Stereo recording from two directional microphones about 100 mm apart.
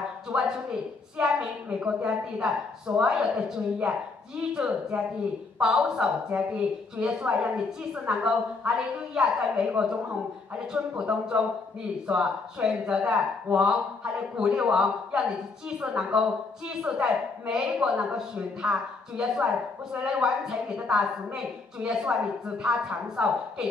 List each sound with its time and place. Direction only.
0.3 s a woman's voice: 10° right (ahead or behind)